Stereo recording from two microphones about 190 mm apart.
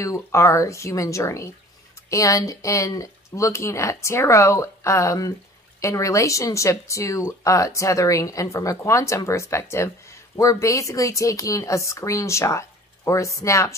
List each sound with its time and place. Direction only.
0.0 s speech: 15° left (ahead or behind)